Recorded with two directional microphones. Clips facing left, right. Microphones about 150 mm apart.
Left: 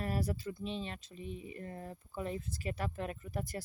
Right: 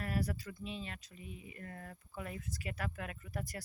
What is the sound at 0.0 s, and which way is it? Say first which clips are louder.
Speech: left 2 dB; 30° left (ahead or behind).